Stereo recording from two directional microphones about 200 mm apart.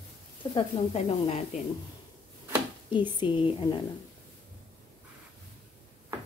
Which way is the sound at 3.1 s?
25° left (ahead or behind).